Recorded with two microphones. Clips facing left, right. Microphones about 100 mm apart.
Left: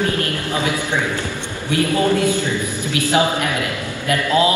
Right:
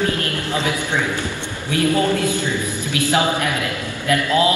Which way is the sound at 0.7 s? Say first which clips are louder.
Left 1 dB; 15° left (ahead or behind).